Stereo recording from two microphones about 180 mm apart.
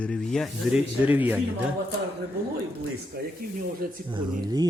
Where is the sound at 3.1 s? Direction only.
60° right (ahead or behind).